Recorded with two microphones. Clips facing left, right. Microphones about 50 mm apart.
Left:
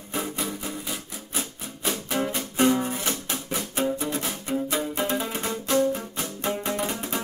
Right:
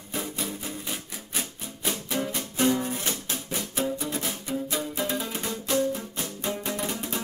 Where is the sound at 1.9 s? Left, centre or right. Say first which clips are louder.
Left 3 dB; left.